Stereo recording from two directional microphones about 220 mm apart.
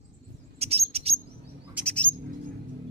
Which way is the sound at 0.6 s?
30° right (ahead or behind).